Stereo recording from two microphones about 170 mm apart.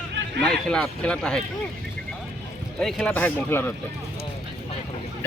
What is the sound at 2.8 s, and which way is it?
Speech, 5° left (ahead or behind).